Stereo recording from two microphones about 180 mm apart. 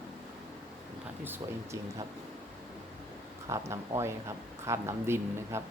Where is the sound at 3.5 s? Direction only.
15° right (ahead or behind).